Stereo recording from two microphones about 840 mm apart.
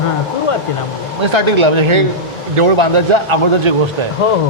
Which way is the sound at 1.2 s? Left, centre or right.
Right.